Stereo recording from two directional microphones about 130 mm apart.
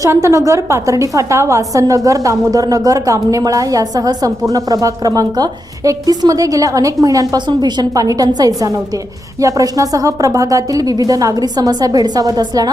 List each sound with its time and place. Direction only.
0.0 s a woman's voice: 20° right (ahead or behind)